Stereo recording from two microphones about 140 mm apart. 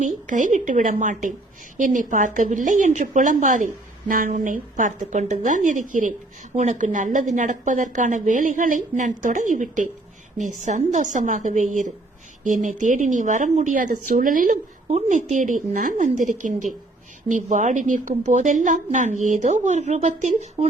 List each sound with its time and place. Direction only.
0.0 s a woman's voice: 65° right (ahead or behind)
14.9 s a woman's voice: 60° right (ahead or behind)